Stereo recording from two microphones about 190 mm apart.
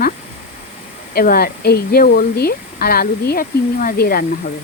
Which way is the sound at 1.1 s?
50° left (ahead or behind).